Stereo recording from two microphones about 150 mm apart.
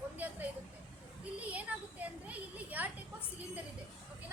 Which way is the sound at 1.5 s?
10° right (ahead or behind).